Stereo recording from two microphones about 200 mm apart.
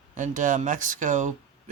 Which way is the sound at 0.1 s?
40° right (ahead or behind).